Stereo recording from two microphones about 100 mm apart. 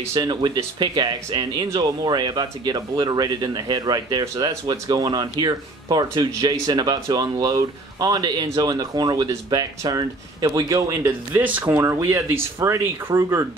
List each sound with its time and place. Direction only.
0.1 s speech: 45° right (ahead or behind); by 11.7 s 15° right (ahead or behind)
11.7 s speech: 25° right (ahead or behind)